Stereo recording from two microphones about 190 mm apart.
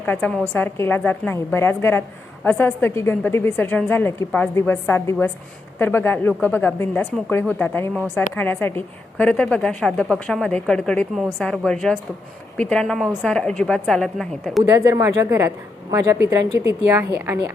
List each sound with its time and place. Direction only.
0.0 s a woman's voice: 10° left (ahead or behind)
14.6 s a woman's voice: 15° right (ahead or behind)